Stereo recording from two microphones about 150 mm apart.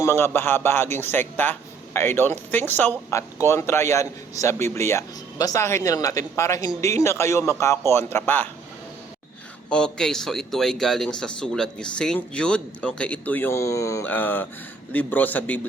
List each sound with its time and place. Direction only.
0.0 s a man's voice: 15° left (ahead or behind)
9.6 s a man's voice: 5° left (ahead or behind)